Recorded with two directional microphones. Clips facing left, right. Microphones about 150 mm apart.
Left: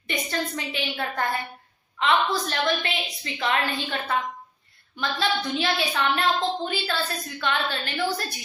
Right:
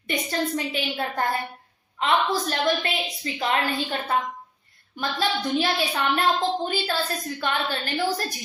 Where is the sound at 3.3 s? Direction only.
35° right (ahead or behind).